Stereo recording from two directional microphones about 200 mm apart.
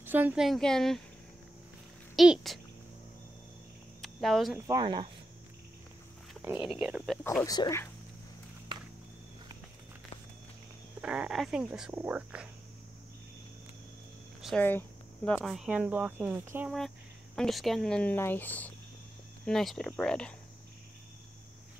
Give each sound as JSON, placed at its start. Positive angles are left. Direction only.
{"t": 0.0, "sound": "speech", "side_deg": -10}
{"t": 2.1, "sound": "speech", "side_deg": 0}
{"t": 4.0, "sound": "a sound", "side_deg": 0}
{"t": 4.6, "sound": "speech", "side_deg": -15}
{"t": 6.4, "sound": "speech", "side_deg": -10}
{"t": 7.2, "sound": "speech", "side_deg": 15}
{"t": 11.0, "sound": "speech", "side_deg": -5}
{"t": 14.4, "sound": "speech", "side_deg": 5}
{"t": 17.4, "sound": "speech", "side_deg": 0}